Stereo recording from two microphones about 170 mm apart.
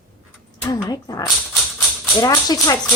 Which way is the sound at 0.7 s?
20° left (ahead or behind).